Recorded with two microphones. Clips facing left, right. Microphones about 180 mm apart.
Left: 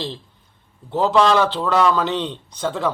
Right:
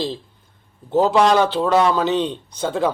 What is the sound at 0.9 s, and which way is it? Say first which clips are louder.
Speech: right 3 dB; 45° right (ahead or behind).